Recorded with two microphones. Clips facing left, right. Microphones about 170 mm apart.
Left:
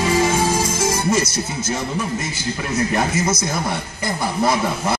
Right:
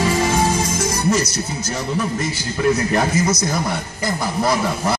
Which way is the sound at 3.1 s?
25° left (ahead or behind).